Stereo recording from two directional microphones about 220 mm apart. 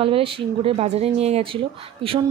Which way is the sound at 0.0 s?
25° right (ahead or behind).